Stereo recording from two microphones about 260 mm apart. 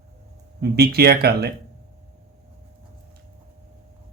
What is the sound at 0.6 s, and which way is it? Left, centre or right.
Speech, right.